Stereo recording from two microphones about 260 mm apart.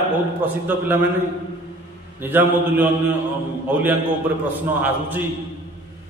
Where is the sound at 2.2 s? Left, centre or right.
Centre.